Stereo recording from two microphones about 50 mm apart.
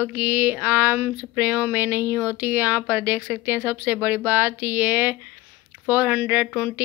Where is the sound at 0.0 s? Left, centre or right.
Right.